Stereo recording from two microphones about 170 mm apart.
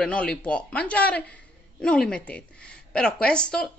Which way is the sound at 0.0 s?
5° left (ahead or behind).